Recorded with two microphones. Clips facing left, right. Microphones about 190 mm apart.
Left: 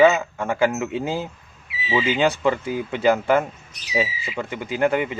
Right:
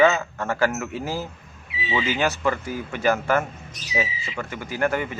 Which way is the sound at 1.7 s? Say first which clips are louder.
Left 3 dB; 5° left (ahead or behind).